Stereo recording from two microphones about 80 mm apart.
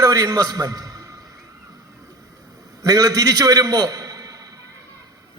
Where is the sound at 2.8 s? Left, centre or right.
Right.